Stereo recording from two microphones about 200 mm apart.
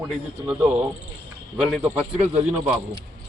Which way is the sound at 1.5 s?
5° right (ahead or behind).